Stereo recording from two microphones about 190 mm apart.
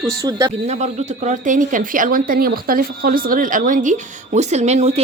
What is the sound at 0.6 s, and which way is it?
A woman's voice, 35° right (ahead or behind).